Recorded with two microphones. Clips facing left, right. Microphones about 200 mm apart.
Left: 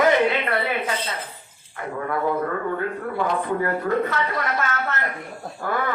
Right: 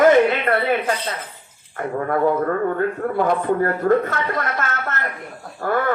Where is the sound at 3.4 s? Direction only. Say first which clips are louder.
Right 5 dB; 50° right (ahead or behind).